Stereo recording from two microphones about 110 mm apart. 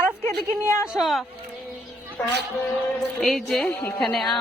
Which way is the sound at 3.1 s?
5° left (ahead or behind).